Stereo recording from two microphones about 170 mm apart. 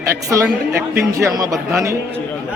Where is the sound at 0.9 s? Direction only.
15° right (ahead or behind).